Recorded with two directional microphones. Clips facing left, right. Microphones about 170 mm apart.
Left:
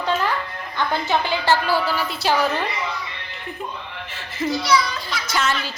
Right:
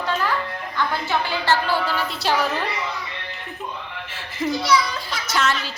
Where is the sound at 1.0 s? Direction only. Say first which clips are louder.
Left 4 dB; 20° left (ahead or behind).